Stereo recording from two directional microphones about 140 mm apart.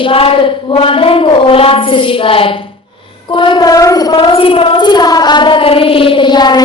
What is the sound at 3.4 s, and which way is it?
Child singing, 30° left (ahead or behind).